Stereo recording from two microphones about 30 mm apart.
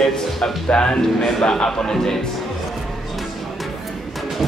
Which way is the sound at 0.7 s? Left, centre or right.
Left.